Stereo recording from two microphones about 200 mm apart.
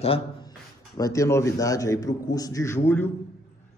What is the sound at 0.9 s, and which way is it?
A man's voice, 15° left (ahead or behind).